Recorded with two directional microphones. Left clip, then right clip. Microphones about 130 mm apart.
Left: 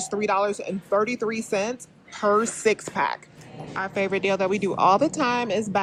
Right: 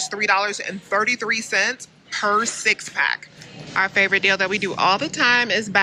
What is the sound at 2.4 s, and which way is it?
Speech, 30° left (ahead or behind).